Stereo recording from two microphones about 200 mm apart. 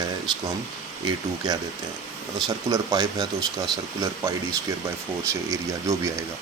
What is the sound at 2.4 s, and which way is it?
Speech, 20° right (ahead or behind).